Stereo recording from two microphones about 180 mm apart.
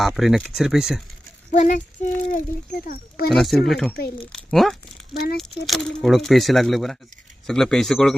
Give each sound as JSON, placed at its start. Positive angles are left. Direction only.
{"t": 0.2, "sound": "speech", "side_deg": 0}
{"t": 1.5, "sound": "speech", "side_deg": 45}
{"t": 3.2, "sound": "speech", "side_deg": 0}
{"t": 5.1, "sound": "speech", "side_deg": 60}
{"t": 5.6, "sound": "speech", "side_deg": 0}